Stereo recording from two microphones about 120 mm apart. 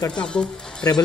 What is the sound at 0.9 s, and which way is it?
Speech, 25° left (ahead or behind).